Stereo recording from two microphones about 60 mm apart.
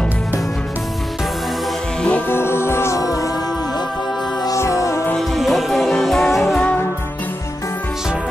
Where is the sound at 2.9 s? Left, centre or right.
Left.